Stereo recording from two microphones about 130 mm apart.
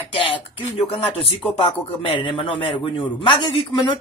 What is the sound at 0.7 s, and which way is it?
A man's voice, 45° left (ahead or behind).